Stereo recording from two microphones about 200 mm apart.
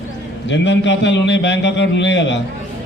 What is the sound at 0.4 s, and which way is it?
A man's voice, 65° left (ahead or behind).